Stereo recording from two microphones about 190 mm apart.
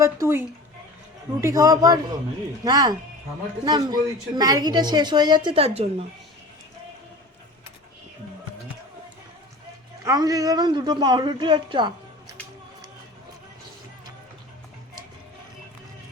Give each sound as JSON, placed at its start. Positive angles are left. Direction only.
{"t": 0.0, "sound": "a man's voice", "side_deg": -15}
{"t": 10.0, "sound": "a woman's voice", "side_deg": -20}